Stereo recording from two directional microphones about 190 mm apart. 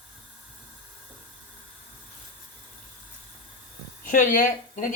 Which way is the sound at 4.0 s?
45° left (ahead or behind).